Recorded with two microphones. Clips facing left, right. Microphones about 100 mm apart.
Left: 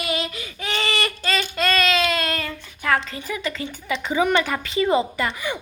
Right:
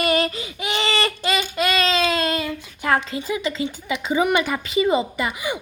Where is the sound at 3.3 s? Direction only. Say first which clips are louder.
Right 3 dB; 15° right (ahead or behind).